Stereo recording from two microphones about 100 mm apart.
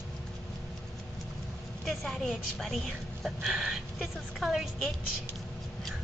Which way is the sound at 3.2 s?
Centre (ahead or behind).